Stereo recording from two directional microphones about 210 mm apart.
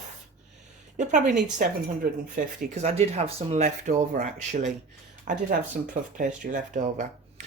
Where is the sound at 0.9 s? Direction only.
35° right (ahead or behind).